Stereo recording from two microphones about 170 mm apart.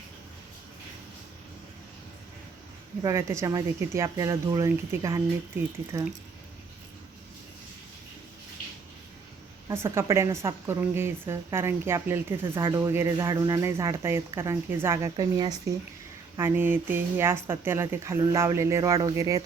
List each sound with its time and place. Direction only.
3.0 s speech: 20° right (ahead or behind)
9.6 s speech: 15° right (ahead or behind)
16.4 s speech: 10° right (ahead or behind)